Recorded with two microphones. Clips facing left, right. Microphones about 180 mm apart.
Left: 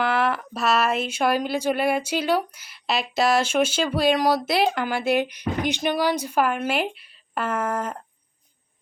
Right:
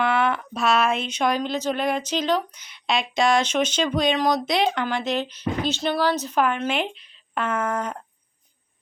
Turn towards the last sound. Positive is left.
turn(degrees=0)  # may be behind; listen again after turning